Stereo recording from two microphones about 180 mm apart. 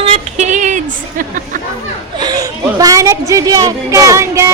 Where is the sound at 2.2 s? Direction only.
20° right (ahead or behind).